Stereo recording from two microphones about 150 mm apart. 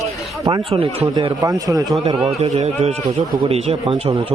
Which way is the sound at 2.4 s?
45° right (ahead or behind).